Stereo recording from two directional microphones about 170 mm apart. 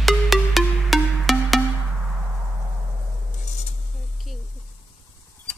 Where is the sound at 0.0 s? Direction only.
Centre (ahead or behind).